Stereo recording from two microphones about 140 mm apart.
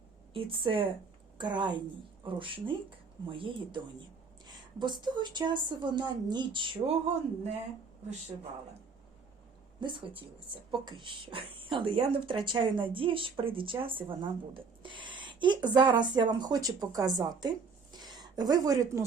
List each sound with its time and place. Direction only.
0.3 s speech: 40° right (ahead or behind)
9.8 s speech: 35° right (ahead or behind)